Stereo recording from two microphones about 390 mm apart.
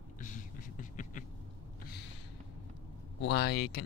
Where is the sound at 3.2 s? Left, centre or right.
Left.